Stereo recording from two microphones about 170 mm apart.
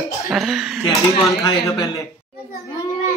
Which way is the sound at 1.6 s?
20° left (ahead or behind).